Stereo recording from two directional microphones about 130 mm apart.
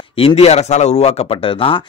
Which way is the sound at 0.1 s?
45° left (ahead or behind).